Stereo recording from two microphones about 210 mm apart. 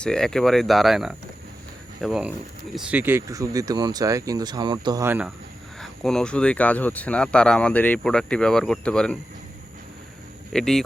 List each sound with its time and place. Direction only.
0.0 s speech: 5° left (ahead or behind)
5.8 s speech: centre (ahead or behind)
10.5 s speech: centre (ahead or behind)